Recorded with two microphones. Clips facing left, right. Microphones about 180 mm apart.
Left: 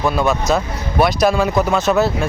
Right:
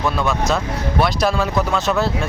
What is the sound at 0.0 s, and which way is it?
Speech, 15° left (ahead or behind).